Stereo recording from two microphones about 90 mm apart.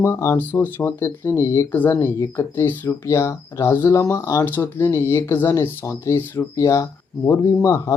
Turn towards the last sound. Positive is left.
turn(degrees=35)  # may be behind; listen again after turning